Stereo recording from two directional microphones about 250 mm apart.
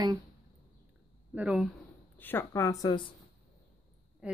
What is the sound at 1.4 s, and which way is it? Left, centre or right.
Speech, centre.